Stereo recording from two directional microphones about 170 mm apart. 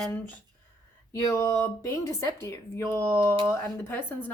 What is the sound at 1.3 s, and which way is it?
Speech, 15° left (ahead or behind).